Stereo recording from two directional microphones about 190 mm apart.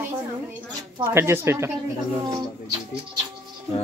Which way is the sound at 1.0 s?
15° right (ahead or behind).